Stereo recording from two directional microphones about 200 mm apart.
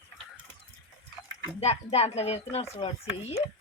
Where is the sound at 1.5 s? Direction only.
30° left (ahead or behind).